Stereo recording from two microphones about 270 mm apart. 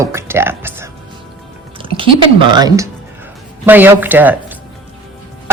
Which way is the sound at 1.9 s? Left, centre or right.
Centre.